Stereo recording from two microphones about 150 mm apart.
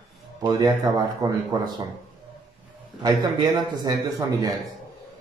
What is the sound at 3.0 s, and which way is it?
Speech, 25° right (ahead or behind).